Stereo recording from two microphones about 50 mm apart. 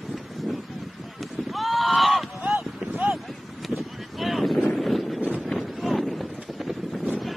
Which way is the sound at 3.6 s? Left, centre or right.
Centre.